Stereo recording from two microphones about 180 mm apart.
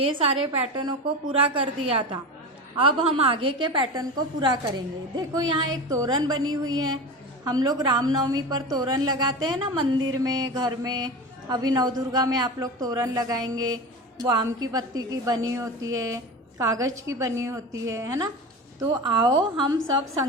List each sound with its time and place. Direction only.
0.0 s a woman's voice: 30° right (ahead or behind)